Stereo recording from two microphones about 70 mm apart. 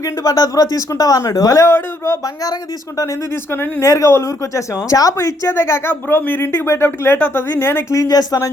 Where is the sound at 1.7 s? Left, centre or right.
Left.